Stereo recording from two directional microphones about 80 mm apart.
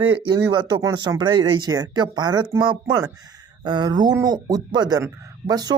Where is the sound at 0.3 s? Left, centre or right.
Right.